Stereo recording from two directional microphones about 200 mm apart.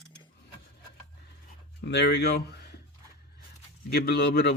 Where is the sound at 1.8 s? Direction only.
60° left (ahead or behind).